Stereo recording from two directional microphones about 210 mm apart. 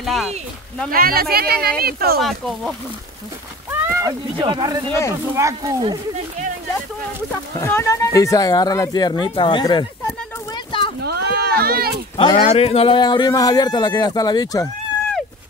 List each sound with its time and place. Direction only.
0.0 s speech: centre (ahead or behind)
0.8 s speech: 45° right (ahead or behind)
2.2 s speech: centre (ahead or behind)
3.8 s a sound: 15° right (ahead or behind)
4.4 s speech: 20° right (ahead or behind)
7.5 s speech: 15° left (ahead or behind)
10.5 s a sound: 25° left (ahead or behind)
11.0 s sheep: 50° right (ahead or behind)
12.2 s speech: 25° left (ahead or behind)